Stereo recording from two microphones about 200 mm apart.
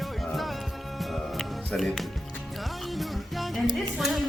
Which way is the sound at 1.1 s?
Centre (ahead or behind).